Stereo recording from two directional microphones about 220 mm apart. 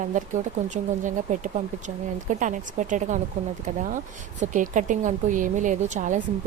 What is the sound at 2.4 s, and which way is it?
Speech, 35° right (ahead or behind).